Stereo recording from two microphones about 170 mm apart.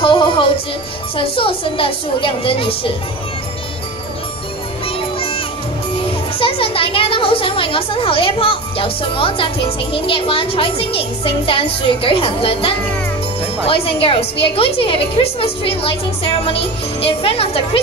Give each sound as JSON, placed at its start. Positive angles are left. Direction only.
{"t": 0.0, "sound": "music", "side_deg": 30}
{"t": 1.1, "sound": "a woman's voice", "side_deg": 30}
{"t": 4.8, "sound": "music", "side_deg": 35}
{"t": 6.3, "sound": "a woman's voice", "side_deg": 30}